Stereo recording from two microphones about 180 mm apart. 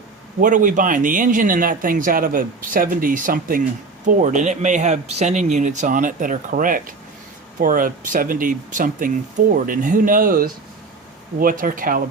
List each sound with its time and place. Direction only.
0.4 s speech: 45° right (ahead or behind)